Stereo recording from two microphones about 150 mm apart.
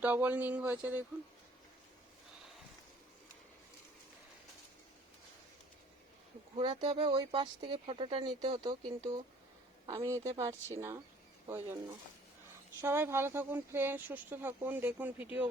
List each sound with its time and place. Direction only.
0.0 s speech: 10° right (ahead or behind)
6.6 s a woman's voice: 30° right (ahead or behind)
12.8 s speech: 15° right (ahead or behind)